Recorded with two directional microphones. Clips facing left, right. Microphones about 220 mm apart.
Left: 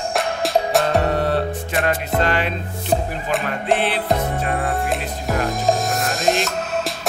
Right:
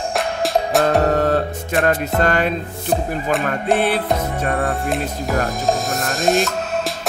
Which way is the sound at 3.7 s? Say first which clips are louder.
Right 2 dB; 45° right (ahead or behind).